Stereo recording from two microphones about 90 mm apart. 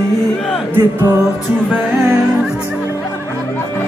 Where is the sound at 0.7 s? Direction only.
25° right (ahead or behind).